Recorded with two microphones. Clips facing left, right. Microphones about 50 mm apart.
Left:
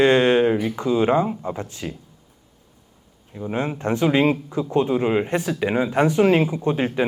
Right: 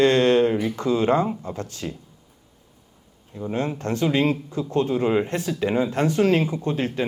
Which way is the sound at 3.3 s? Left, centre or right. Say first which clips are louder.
Left 1 dB; centre.